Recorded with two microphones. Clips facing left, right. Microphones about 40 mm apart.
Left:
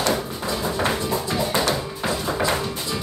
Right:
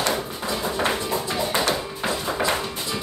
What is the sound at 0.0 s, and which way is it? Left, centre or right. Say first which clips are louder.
Music: left 2 dB; right.